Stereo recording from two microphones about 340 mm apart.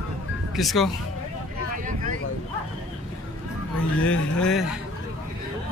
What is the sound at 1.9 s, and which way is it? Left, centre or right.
Vehicle, right.